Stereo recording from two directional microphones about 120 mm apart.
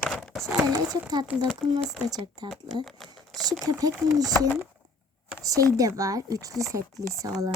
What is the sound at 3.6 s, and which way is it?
Speech, 30° right (ahead or behind).